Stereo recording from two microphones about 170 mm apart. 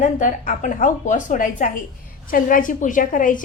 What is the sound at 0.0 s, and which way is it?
A woman's voice, 50° left (ahead or behind).